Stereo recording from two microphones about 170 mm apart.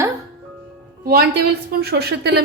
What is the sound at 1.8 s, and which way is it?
Speech, 70° right (ahead or behind).